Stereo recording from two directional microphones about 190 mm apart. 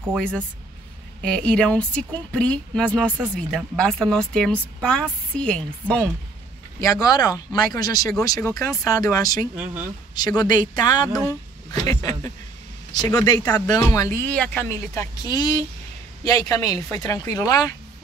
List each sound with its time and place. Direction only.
0.1 s speech: 5° left (ahead or behind)
6.8 s speech: 15° left (ahead or behind)
15.2 s speech: 20° left (ahead or behind)